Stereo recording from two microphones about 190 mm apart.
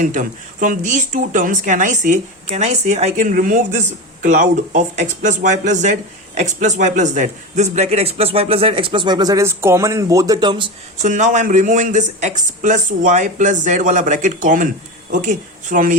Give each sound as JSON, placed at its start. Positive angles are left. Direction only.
{"t": 0.0, "sound": "speech", "side_deg": -45}
{"t": 10.9, "sound": "speech", "side_deg": -40}